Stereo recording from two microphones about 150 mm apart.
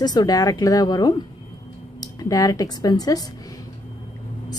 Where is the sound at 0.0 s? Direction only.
25° left (ahead or behind).